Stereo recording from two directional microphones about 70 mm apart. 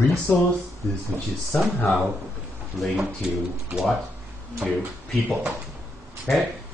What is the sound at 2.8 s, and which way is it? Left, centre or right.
Speech, centre.